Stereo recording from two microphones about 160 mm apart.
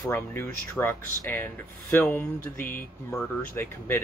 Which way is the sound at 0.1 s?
15° left (ahead or behind).